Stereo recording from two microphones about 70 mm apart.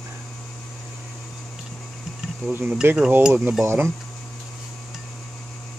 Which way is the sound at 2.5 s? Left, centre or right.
Right.